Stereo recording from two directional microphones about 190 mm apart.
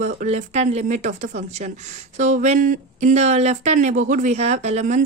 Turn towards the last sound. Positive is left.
turn(degrees=-40)  # may be behind; listen again after turning